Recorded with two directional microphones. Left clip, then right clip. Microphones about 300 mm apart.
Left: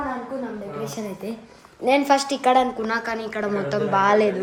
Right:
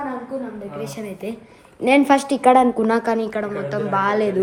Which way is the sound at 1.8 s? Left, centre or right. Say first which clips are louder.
Right 3 dB; right.